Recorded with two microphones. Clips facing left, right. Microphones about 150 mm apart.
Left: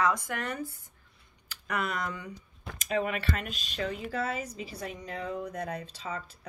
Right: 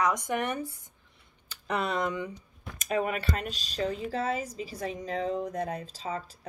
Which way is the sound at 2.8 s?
40° right (ahead or behind).